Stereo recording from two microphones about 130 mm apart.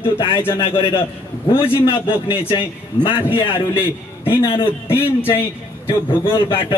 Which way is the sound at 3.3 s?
40° left (ahead or behind).